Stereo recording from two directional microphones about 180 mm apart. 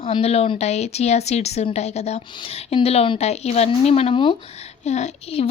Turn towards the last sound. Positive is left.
turn(degrees=35)  # may be behind; listen again after turning